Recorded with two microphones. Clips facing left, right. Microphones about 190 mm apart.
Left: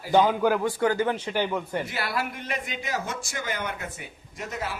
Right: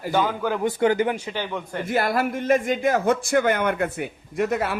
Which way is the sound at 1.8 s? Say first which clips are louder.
Right 8 dB; 50° right (ahead or behind).